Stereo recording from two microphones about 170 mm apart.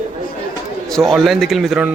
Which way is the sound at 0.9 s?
Centre (ahead or behind).